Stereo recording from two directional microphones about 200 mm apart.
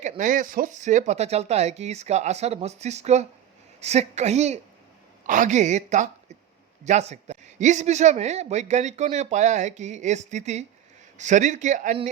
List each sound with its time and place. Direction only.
0.0 s a man's voice: 40° right (ahead or behind)